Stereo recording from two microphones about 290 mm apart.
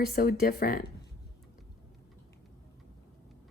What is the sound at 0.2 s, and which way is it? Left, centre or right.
Speech, left.